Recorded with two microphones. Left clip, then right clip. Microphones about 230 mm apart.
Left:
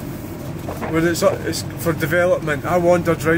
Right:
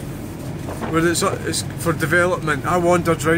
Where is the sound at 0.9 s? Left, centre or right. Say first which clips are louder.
Left 2 dB; centre.